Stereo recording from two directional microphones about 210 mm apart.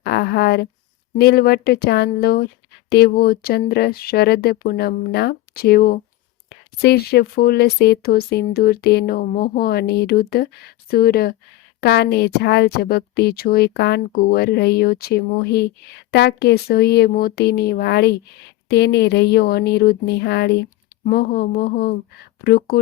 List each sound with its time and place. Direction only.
0.0 s speech: 50° left (ahead or behind)